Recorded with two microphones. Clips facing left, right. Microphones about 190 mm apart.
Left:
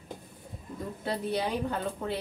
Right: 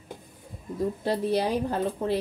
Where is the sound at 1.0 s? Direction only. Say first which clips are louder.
Right 4 dB; 35° right (ahead or behind).